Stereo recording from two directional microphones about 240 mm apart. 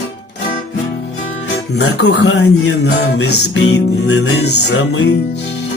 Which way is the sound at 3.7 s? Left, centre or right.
Left.